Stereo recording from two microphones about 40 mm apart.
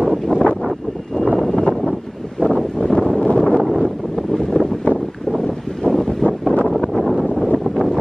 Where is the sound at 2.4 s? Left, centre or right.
Centre.